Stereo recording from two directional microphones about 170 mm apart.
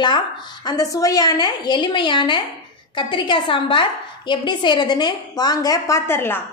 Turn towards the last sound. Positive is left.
turn(degrees=15)  # may be behind; listen again after turning